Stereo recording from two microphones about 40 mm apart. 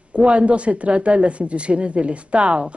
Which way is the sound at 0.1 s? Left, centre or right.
Right.